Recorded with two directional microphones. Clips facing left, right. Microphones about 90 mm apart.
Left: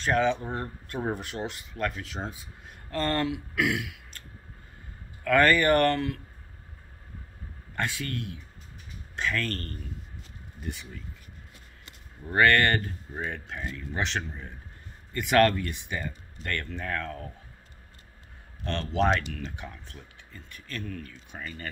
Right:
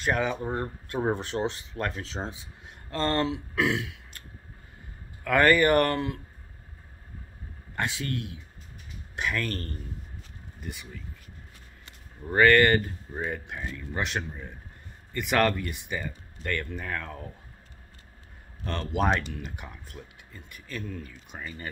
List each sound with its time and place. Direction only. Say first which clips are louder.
0.0 s speech: left 2 dB; 10° right (ahead or behind); by 4.0 s 30° right (ahead or behind)
5.2 s speech: right 1 dB; 20° right (ahead or behind)
7.7 s speech: right 1 dB; 20° right (ahead or behind)
10.6 s speech: left 2 dB; centre (ahead or behind)
12.3 s speech: right 3 dB; 5° right (ahead or behind)
18.7 s speech: left 1 dB; 10° right (ahead or behind)